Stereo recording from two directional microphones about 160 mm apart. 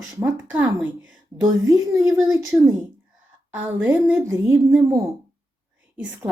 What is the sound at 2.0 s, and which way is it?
Speech, centre (ahead or behind).